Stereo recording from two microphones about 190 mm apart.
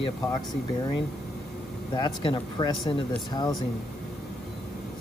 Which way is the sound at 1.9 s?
25° left (ahead or behind).